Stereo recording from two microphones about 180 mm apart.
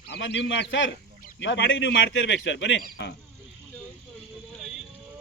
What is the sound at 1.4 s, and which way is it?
A man's voice, 90° left.